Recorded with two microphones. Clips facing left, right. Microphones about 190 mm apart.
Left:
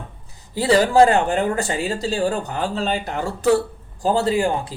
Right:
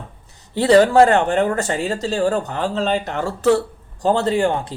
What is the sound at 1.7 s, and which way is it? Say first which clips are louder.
Speech: right 1 dB; 15° left (ahead or behind).